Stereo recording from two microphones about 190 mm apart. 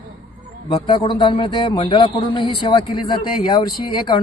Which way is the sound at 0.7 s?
25° left (ahead or behind).